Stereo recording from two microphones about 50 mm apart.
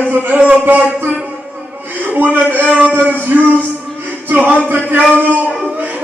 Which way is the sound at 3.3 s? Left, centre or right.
Right.